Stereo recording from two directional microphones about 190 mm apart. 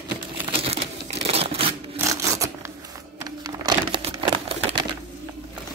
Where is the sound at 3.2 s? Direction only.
20° right (ahead or behind).